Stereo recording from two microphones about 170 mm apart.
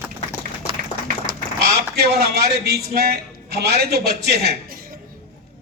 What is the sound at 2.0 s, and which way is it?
A man's voice, 70° right (ahead or behind).